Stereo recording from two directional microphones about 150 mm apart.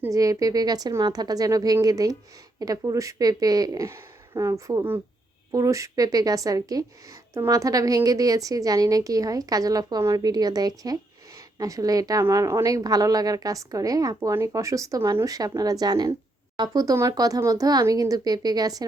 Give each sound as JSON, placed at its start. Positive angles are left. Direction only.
{"t": 0.0, "sound": "a woman's voice", "side_deg": -20}